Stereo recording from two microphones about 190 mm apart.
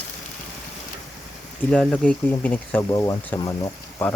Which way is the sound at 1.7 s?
5° left (ahead or behind).